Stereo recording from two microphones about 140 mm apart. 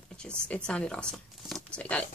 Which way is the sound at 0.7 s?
5° left (ahead or behind).